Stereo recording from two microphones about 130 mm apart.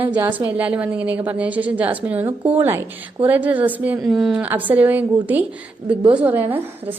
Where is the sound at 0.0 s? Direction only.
15° right (ahead or behind).